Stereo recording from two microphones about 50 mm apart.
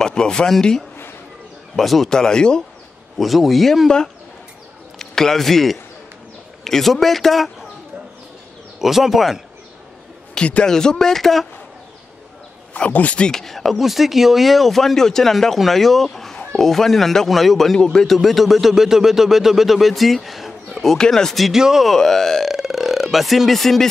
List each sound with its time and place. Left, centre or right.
0.0 s speech: centre
2.0 s speech: centre
3.2 s speech: centre
4.9 s a man's voice: centre
8.7 s speech: centre
10.3 s a man's voice: centre
12.7 s speech: left
13.3 s speech: centre
17.7 s speech: centre
18.0 s speech: centre
21.5 s speech: centre
21.8 s speech: centre
22.5 s speech: centre